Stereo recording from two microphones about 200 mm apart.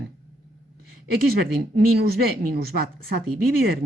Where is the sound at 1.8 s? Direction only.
50° right (ahead or behind).